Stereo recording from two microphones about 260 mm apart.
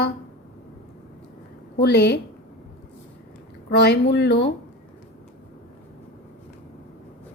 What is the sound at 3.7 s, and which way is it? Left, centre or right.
Speech, left.